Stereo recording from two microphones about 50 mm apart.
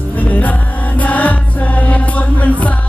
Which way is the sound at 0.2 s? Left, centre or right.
Left.